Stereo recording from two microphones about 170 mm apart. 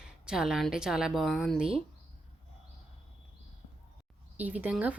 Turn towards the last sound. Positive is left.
turn(degrees=-10)  # may be behind; listen again after turning